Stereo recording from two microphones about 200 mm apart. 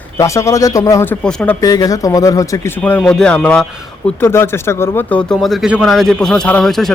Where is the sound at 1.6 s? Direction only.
20° left (ahead or behind).